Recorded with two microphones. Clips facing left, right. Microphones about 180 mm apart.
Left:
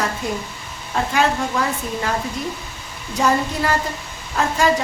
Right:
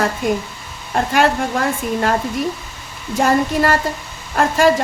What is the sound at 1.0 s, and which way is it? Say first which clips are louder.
Speech: right 3 dB; 60° right (ahead or behind).